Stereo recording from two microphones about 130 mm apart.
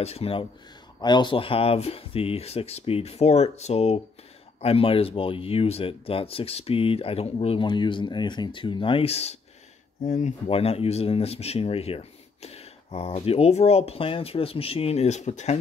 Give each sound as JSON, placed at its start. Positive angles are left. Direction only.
{"t": 0.0, "sound": "speech", "side_deg": 50}
{"t": 1.0, "sound": "speech", "side_deg": 35}